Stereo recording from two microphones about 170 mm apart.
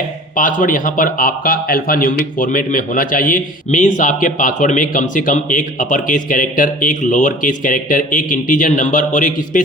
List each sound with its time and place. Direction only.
0.3 s a man's voice: 55° left (ahead or behind)